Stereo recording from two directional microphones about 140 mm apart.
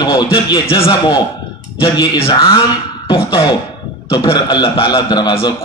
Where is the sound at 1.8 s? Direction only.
30° left (ahead or behind).